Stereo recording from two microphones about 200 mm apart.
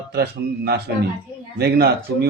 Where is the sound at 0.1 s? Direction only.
50° right (ahead or behind).